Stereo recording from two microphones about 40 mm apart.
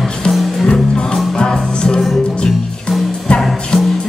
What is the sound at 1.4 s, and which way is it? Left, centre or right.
Music, centre.